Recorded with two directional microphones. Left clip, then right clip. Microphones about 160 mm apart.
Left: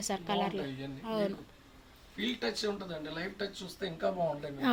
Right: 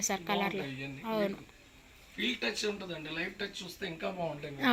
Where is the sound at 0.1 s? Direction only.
Centre (ahead or behind).